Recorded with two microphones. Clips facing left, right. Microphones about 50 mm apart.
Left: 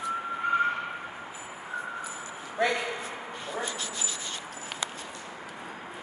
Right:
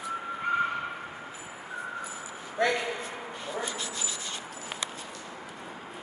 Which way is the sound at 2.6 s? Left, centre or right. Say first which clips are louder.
Even; centre.